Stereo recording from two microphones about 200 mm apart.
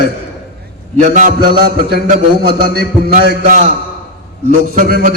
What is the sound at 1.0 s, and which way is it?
A man's voice, 40° right (ahead or behind).